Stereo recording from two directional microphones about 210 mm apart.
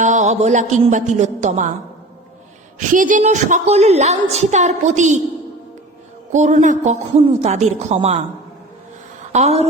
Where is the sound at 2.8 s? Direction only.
40° right (ahead or behind).